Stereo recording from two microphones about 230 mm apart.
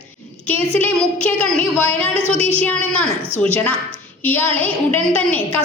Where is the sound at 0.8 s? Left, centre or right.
Centre.